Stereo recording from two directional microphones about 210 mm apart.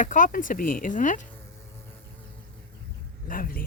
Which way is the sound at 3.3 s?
45° left (ahead or behind).